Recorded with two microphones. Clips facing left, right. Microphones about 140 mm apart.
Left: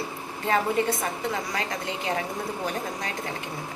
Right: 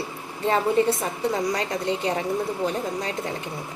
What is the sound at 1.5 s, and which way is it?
Speech, 35° right (ahead or behind).